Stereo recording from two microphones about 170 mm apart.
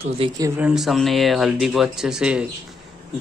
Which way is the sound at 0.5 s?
5° right (ahead or behind).